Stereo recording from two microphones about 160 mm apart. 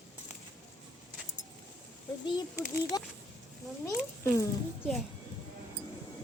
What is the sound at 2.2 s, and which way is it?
Speech, 25° left (ahead or behind).